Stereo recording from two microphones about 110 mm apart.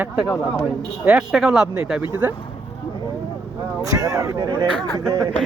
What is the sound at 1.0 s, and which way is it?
Speech, 10° right (ahead or behind).